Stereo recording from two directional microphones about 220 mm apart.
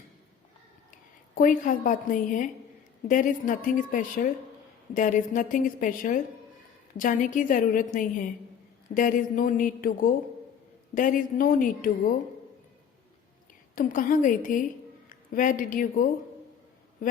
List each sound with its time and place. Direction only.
1.4 s a woman's voice: 35° left (ahead or behind)
9.0 s a woman's voice: 35° left (ahead or behind)
13.7 s a woman's voice: 40° left (ahead or behind)